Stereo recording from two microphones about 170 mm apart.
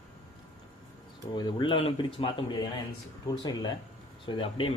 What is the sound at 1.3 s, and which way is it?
A man's voice, 25° left (ahead or behind).